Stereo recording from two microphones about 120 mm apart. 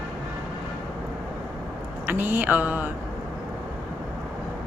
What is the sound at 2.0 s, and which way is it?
Speech, 15° right (ahead or behind).